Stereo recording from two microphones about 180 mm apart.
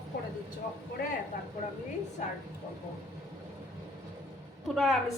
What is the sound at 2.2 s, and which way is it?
Speech, 40° left (ahead or behind).